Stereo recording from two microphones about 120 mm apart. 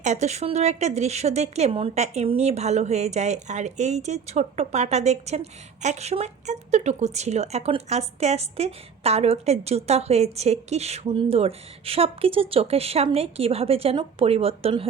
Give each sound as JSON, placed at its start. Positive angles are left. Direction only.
{"t": 0.0, "sound": "speech", "side_deg": -70}
{"t": 11.1, "sound": "speech", "side_deg": -50}